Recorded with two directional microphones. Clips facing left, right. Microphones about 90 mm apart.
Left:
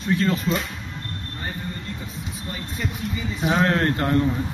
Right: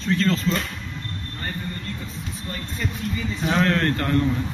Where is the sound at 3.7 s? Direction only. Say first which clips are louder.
Left 1 dB; 25° left (ahead or behind).